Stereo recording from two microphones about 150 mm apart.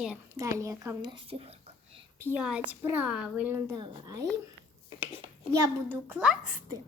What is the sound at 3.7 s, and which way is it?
Speech, 30° right (ahead or behind).